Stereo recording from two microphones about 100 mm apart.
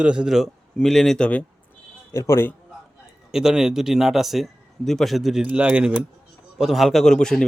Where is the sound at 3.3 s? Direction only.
5° right (ahead or behind).